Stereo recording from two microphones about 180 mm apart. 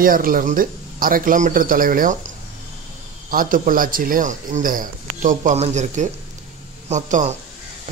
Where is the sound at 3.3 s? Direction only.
50° right (ahead or behind).